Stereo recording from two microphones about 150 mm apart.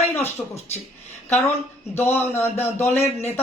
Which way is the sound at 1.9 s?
15° left (ahead or behind).